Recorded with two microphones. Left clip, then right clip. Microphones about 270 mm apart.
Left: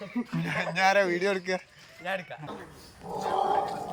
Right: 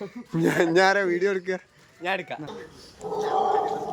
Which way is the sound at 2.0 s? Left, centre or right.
Right.